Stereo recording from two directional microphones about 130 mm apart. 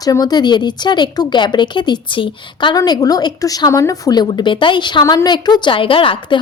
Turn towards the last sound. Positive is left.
turn(degrees=40)  # may be behind; listen again after turning